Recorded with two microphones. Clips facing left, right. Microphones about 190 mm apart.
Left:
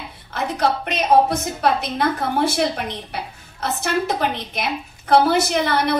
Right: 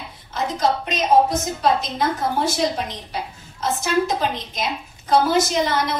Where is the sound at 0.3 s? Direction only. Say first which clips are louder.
Even; 65° left (ahead or behind).